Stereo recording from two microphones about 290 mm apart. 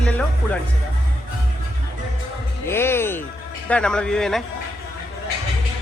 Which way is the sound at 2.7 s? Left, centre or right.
Centre.